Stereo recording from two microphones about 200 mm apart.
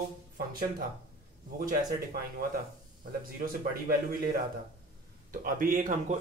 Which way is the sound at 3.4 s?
45° right (ahead or behind).